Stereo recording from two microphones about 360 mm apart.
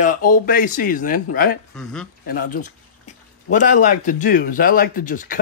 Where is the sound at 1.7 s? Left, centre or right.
Centre.